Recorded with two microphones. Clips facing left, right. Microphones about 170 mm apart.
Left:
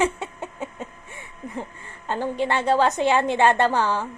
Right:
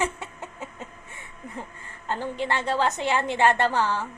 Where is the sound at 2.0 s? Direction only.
20° left (ahead or behind).